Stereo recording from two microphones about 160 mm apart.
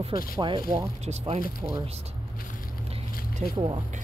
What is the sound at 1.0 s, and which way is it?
Speech, 45° right (ahead or behind).